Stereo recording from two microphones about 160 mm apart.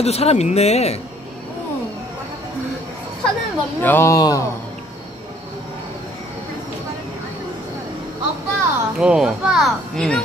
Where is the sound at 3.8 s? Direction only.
15° left (ahead or behind).